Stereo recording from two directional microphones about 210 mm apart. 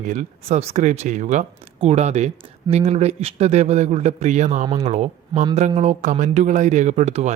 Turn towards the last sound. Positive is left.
turn(degrees=-30)  # may be behind; listen again after turning